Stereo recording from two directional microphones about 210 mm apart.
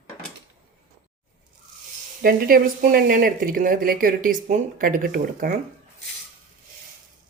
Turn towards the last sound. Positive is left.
turn(degrees=-40)  # may be behind; listen again after turning